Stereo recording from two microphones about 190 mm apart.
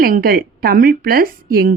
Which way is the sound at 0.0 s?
50° right (ahead or behind).